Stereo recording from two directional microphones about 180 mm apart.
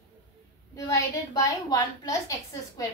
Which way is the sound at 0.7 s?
20° left (ahead or behind).